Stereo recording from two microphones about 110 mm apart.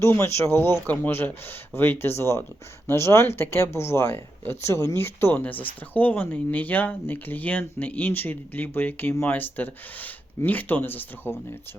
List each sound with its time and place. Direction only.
0.0 s speech: 25° left (ahead or behind)